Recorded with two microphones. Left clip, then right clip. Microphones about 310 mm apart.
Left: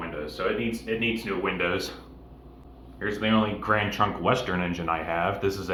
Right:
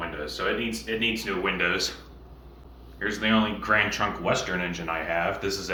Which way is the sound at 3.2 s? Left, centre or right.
Centre.